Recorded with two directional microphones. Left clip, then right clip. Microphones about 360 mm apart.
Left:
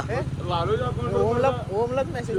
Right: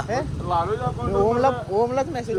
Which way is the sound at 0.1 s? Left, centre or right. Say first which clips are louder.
Right 5 dB; right.